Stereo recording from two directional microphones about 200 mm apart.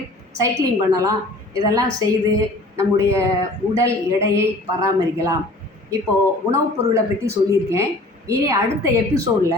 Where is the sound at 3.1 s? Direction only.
15° right (ahead or behind).